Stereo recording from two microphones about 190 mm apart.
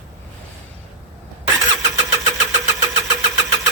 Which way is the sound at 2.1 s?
15° right (ahead or behind).